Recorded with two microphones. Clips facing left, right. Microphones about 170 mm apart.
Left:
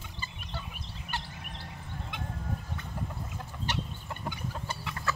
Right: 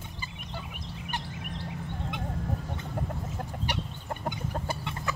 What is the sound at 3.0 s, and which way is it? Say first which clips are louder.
Chicken: right 5 dB; 50° right (ahead or behind).